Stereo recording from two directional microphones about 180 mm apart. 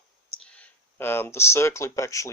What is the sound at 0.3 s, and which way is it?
Speech, 5° left (ahead or behind).